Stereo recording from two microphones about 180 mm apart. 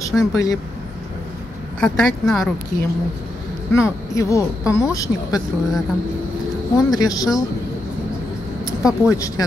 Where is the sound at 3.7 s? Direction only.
15° left (ahead or behind).